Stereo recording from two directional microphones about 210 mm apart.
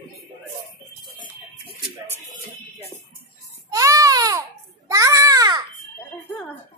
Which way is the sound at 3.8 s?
15° right (ahead or behind).